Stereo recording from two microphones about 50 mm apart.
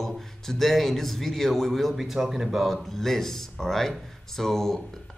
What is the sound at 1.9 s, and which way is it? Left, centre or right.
Speech, centre.